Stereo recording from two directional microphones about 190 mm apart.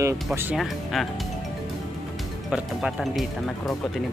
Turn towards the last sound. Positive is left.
turn(degrees=0)  # may be behind; listen again after turning